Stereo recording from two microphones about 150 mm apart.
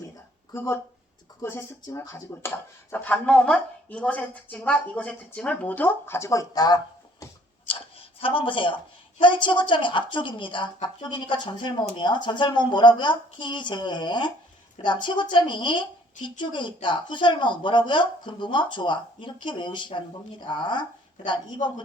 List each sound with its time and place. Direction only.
0.5 s speech: 15° left (ahead or behind)
7.7 s a sound: 35° left (ahead or behind)
9.2 s a woman's voice: 35° left (ahead or behind)